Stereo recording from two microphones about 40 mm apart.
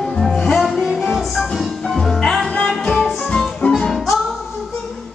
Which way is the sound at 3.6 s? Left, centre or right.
Left.